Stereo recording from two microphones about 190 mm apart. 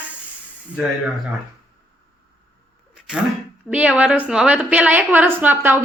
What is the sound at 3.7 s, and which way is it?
A woman's voice, 5° right (ahead or behind).